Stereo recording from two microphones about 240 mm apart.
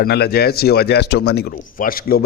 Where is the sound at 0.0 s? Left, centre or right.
Left.